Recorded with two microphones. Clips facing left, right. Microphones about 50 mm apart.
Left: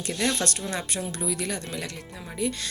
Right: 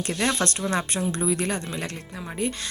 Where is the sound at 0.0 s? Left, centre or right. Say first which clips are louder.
Right 2 dB; right.